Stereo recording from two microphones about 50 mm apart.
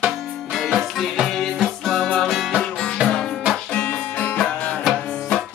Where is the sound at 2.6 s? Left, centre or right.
Centre.